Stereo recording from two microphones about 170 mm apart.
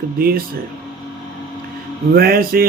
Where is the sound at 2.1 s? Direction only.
60° right (ahead or behind).